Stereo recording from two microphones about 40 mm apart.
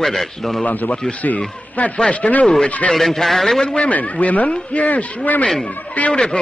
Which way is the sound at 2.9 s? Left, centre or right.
Centre.